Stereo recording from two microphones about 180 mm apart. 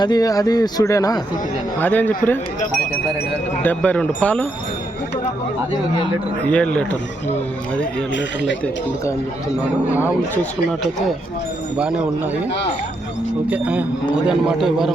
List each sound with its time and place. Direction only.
0.0 s speech: 20° left (ahead or behind)
3.6 s speech: 10° left (ahead or behind)
6.4 s speech: 5° left (ahead or behind)
9.8 s speech: 10° right (ahead or behind)
11.8 s speech: 5° right (ahead or behind)
13.5 s a man's voice: 10° right (ahead or behind)